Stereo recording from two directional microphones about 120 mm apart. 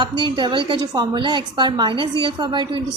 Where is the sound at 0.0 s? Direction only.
40° right (ahead or behind).